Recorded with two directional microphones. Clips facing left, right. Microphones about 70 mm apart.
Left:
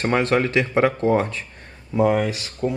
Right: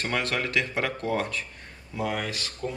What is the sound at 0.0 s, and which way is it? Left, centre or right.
Speech, left.